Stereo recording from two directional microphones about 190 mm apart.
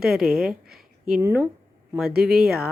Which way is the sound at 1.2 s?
15° right (ahead or behind).